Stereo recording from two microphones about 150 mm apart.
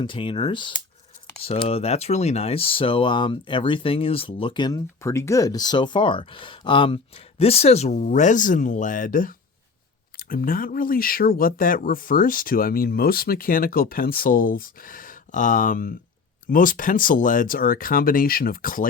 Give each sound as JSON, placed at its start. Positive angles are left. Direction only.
{"t": 0.0, "sound": "speech", "side_deg": 35}
{"t": 10.2, "sound": "speech", "side_deg": 75}